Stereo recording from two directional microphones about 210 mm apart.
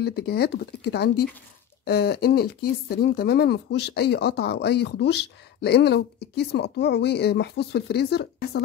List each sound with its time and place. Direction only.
0.0 s speech: 50° left (ahead or behind)